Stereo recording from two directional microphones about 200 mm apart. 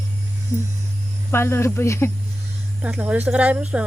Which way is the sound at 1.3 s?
10° left (ahead or behind).